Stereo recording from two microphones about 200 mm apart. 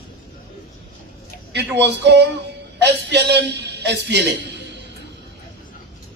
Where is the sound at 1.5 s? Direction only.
60° right (ahead or behind).